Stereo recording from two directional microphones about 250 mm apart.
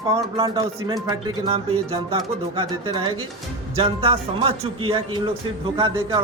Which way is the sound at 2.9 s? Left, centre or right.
Centre.